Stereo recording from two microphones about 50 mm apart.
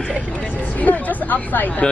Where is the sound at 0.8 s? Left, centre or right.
Left.